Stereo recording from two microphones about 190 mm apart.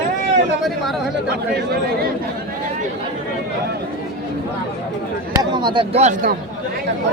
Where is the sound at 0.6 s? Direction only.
Centre (ahead or behind).